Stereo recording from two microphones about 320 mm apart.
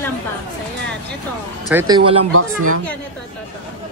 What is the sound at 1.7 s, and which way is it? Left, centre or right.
Speech, centre.